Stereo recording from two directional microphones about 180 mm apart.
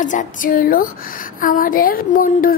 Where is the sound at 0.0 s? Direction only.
45° left (ahead or behind).